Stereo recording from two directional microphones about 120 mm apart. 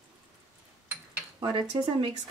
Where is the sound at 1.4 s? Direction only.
40° right (ahead or behind).